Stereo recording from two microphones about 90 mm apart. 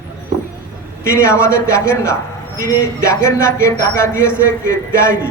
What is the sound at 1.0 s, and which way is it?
A man's voice, 30° left (ahead or behind).